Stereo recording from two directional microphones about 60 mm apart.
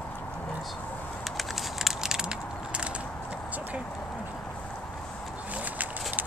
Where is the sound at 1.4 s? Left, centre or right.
Centre.